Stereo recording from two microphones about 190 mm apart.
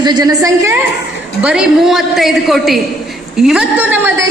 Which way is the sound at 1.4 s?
5° right (ahead or behind).